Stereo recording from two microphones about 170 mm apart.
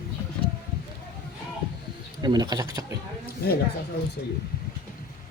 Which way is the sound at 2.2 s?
25° right (ahead or behind).